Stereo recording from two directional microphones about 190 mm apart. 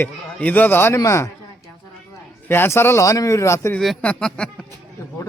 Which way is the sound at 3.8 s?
Centre (ahead or behind).